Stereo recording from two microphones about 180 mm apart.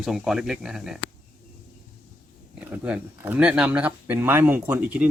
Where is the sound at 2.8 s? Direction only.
10° right (ahead or behind).